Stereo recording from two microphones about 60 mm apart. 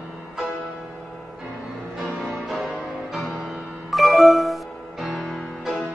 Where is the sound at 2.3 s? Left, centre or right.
Centre.